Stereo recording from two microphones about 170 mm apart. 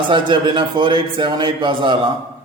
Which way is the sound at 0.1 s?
30° right (ahead or behind).